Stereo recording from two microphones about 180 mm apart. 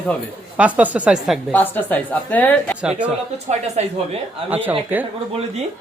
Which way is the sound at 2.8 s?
5° right (ahead or behind).